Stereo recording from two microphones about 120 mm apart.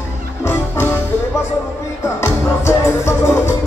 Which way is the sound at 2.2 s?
25° left (ahead or behind).